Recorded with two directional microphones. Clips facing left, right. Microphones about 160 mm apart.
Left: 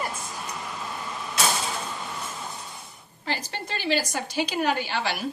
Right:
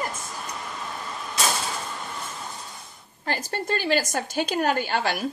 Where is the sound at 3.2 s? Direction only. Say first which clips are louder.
Right 3 dB; 50° right (ahead or behind).